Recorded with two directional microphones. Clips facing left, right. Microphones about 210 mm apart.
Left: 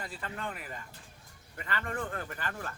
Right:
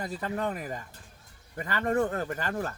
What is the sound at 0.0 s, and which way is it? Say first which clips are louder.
Speech: right 8 dB; 40° right (ahead or behind).